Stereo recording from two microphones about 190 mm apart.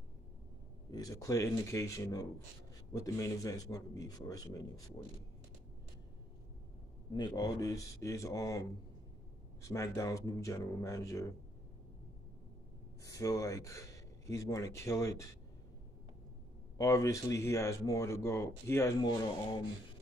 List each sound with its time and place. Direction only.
0.9 s a man's voice: 20° left (ahead or behind)
7.2 s speech: 20° left (ahead or behind)
13.0 s speech: 15° left (ahead or behind)
16.7 s speech: 15° left (ahead or behind)